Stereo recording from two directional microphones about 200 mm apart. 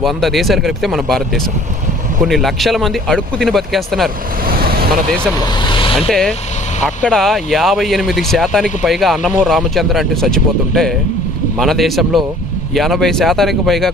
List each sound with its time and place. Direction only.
0.0 s speech: centre (ahead or behind)
2.2 s speech: centre (ahead or behind)
4.4 s vehicle: 45° right (ahead or behind)
5.4 s speech: 25° left (ahead or behind)
6.1 s speech: centre (ahead or behind)